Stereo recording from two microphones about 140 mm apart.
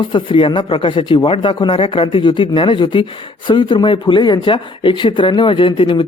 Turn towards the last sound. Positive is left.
turn(degrees=35)  # may be behind; listen again after turning